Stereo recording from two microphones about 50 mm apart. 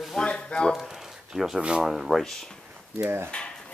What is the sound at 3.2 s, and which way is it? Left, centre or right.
Speech, left.